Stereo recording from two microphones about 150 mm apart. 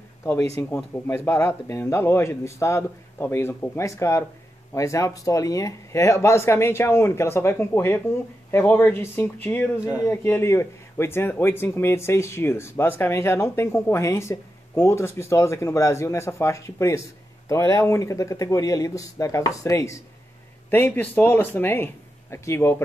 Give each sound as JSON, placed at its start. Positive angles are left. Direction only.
{"t": 0.2, "sound": "a man's voice", "side_deg": 20}